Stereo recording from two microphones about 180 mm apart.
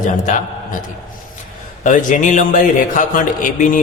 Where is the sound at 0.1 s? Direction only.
45° left (ahead or behind).